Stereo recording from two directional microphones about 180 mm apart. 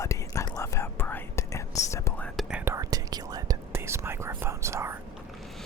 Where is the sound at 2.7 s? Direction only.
20° right (ahead or behind).